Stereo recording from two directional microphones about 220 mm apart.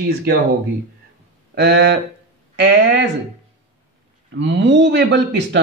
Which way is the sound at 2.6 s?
50° right (ahead or behind).